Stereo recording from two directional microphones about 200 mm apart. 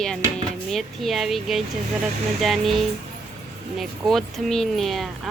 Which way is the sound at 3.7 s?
Centre (ahead or behind).